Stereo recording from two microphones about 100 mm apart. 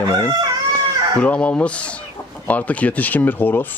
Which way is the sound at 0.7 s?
15° left (ahead or behind).